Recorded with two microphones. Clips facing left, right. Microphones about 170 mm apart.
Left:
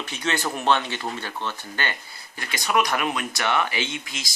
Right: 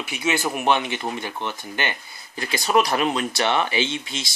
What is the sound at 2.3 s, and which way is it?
Speech, 30° right (ahead or behind).